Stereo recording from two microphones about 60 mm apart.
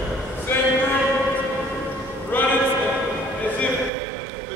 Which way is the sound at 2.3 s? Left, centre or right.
Left.